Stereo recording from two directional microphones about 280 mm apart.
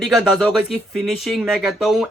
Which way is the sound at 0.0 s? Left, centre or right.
Centre.